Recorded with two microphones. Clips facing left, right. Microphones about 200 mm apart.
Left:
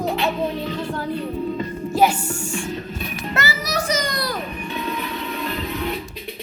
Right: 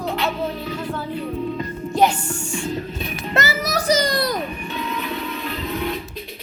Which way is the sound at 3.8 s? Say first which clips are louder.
Right 7 dB; 35° right (ahead or behind).